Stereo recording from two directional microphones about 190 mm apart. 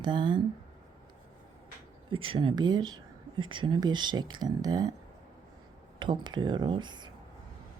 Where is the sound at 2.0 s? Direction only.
30° right (ahead or behind).